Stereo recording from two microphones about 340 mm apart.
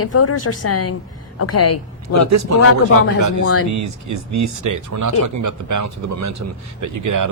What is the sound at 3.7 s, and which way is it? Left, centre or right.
Speech, right.